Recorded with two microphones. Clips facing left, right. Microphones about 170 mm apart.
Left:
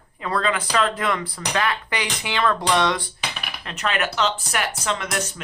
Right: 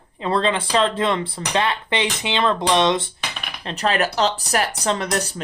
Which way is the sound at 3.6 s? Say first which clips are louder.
Right 4 dB; 35° right (ahead or behind).